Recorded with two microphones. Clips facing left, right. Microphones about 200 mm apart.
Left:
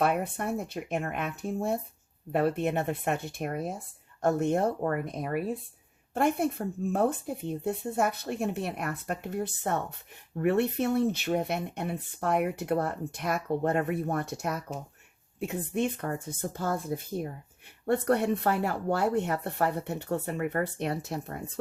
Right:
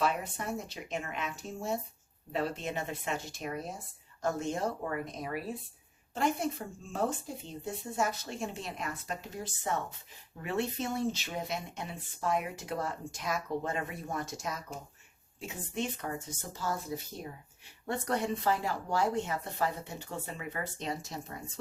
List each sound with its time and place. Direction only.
0.0 s speech: 55° left (ahead or behind)